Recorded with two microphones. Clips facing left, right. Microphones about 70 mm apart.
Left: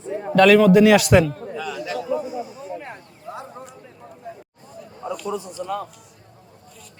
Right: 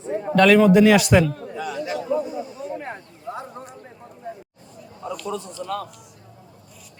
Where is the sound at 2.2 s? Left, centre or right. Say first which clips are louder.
Left 1 dB; centre.